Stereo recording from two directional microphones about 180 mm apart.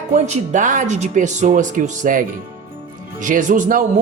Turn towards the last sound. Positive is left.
turn(degrees=-45)  # may be behind; listen again after turning